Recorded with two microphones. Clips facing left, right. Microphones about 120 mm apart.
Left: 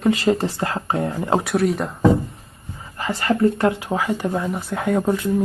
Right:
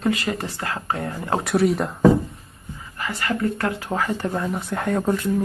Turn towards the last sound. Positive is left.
turn(degrees=10)  # may be behind; listen again after turning